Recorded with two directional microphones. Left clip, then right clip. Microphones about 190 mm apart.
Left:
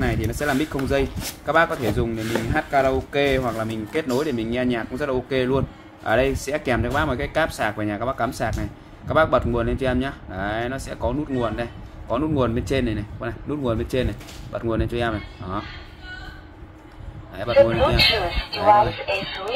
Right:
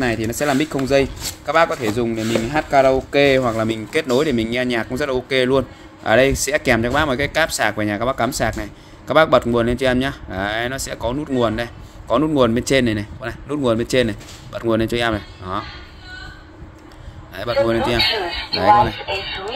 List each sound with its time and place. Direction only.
0.0 s speech: 40° right (ahead or behind)
17.4 s speech: 45° right (ahead or behind)
17.7 s speech: 15° left (ahead or behind)